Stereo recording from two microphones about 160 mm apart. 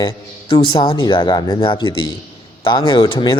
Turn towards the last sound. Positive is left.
turn(degrees=30)  # may be behind; listen again after turning